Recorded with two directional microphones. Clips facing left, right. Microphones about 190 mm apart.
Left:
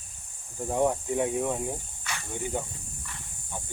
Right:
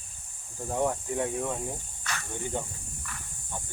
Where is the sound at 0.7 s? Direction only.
20° left (ahead or behind).